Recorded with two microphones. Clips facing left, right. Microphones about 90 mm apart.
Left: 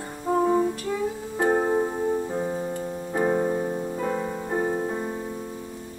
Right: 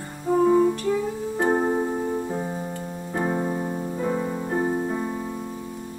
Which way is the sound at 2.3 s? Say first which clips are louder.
Left 2 dB; centre (ahead or behind).